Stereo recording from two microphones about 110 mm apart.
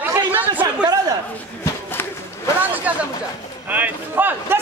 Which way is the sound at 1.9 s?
20° left (ahead or behind).